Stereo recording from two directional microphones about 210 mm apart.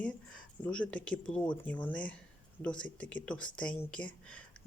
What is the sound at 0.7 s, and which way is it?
Speech, 5° left (ahead or behind).